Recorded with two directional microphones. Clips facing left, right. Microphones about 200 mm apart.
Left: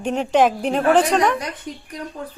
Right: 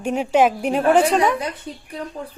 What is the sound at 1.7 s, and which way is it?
Speech, 30° right (ahead or behind).